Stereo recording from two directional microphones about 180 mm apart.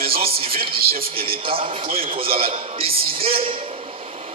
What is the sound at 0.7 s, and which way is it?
Speech, 55° right (ahead or behind).